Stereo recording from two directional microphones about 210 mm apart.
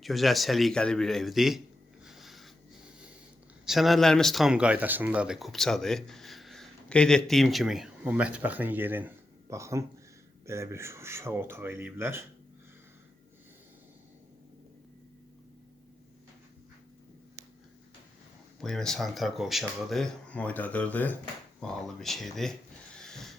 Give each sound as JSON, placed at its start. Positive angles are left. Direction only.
{"t": 0.0, "sound": "speech", "side_deg": 0}
{"t": 2.0, "sound": "a sound", "side_deg": 0}
{"t": 3.7, "sound": "speech", "side_deg": 0}
{"t": 18.6, "sound": "speech", "side_deg": 0}
{"t": 23.0, "sound": "wheeze", "side_deg": 0}